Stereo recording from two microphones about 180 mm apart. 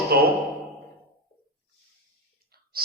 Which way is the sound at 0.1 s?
60° right (ahead or behind).